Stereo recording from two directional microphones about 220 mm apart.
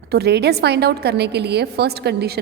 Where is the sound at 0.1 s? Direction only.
50° right (ahead or behind).